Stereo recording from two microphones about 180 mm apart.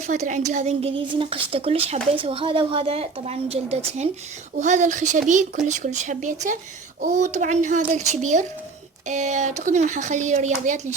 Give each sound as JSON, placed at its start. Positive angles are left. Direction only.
{"t": 0.0, "sound": "a woman's voice", "side_deg": -40}